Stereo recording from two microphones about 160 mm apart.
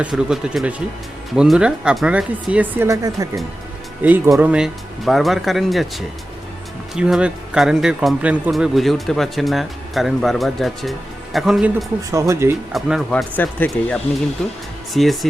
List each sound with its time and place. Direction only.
0.0 s speech: 5° right (ahead or behind)
6.9 s speech: 5° right (ahead or behind)
12.1 s speech: 20° right (ahead or behind)
12.7 s speech: centre (ahead or behind)